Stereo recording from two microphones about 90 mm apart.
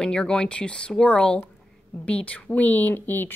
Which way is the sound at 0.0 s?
10° left (ahead or behind).